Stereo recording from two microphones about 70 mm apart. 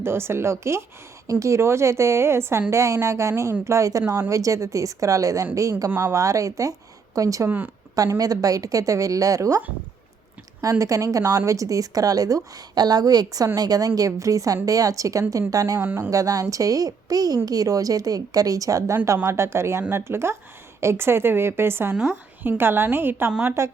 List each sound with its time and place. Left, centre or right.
0.0 s a woman's voice: right
10.6 s a woman's voice: right
23.6 s a woman's voice: right